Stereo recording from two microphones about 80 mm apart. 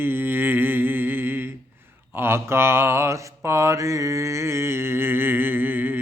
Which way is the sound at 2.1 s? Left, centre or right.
Right.